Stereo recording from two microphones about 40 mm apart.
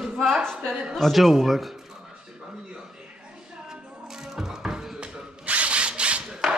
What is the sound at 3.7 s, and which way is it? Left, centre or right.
Music, centre.